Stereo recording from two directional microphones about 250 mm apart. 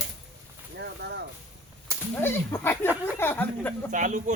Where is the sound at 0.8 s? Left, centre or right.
Right.